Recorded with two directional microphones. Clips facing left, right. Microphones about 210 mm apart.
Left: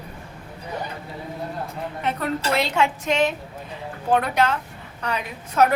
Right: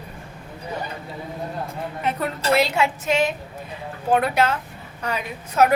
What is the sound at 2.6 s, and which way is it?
A woman's voice, 5° right (ahead or behind).